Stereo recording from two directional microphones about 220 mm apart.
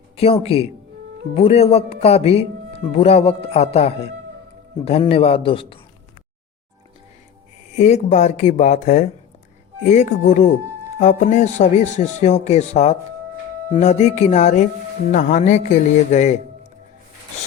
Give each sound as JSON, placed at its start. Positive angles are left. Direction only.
{"t": 0.2, "sound": "speech", "side_deg": 25}
{"t": 7.8, "sound": "speech", "side_deg": 30}